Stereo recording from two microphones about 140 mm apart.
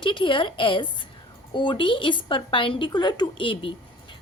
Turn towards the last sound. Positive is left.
turn(degrees=40)  # may be behind; listen again after turning